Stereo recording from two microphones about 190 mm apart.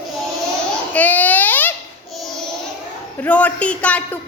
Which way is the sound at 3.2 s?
10° left (ahead or behind).